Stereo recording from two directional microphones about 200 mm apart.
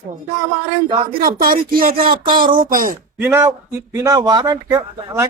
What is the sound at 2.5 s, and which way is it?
Speech, 45° right (ahead or behind).